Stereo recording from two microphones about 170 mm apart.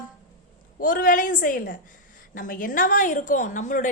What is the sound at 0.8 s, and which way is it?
A woman's voice, 55° left (ahead or behind).